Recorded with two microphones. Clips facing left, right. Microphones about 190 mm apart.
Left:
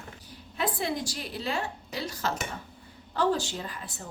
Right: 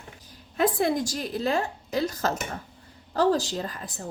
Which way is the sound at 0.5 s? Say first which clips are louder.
Right 7 dB; 50° right (ahead or behind).